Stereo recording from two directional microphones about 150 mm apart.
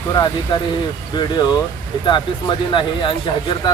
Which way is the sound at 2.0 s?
30° left (ahead or behind).